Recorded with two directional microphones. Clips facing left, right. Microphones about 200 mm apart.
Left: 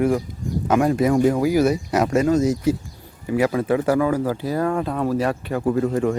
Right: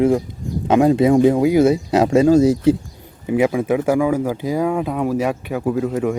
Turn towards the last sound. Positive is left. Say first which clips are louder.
# even
turn(degrees=0)  # may be behind; listen again after turning